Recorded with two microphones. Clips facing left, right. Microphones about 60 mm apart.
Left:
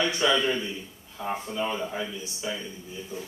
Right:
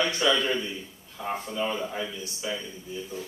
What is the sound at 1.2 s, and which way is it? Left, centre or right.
Speech, centre.